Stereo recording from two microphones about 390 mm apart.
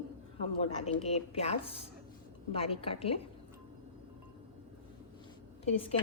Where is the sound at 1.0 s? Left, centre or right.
Centre.